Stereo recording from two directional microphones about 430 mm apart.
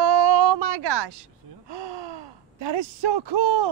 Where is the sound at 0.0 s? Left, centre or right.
Right.